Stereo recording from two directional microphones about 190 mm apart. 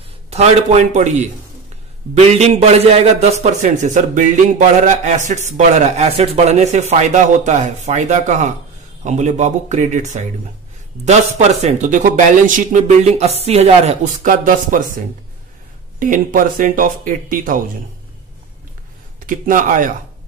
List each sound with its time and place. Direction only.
0.3 s a man's voice: 35° right (ahead or behind)
16.0 s speech: 45° right (ahead or behind)
19.1 s speech: 45° right (ahead or behind)